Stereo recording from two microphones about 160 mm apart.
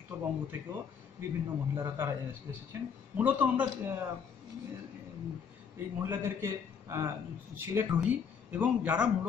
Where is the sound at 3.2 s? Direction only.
10° right (ahead or behind).